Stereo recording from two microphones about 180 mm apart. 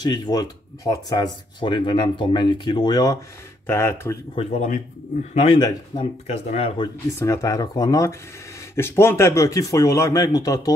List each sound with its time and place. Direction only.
0.0 s a man's voice: 25° left (ahead or behind)
4.5 s speech: 45° left (ahead or behind)
5.3 s speech: 30° left (ahead or behind)
7.2 s a man's voice: 20° left (ahead or behind)